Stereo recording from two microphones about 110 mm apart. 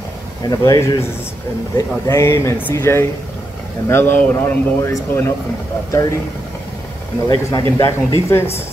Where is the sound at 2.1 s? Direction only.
25° left (ahead or behind).